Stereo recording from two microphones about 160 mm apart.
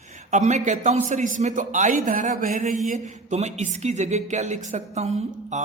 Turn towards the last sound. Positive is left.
turn(degrees=-40)  # may be behind; listen again after turning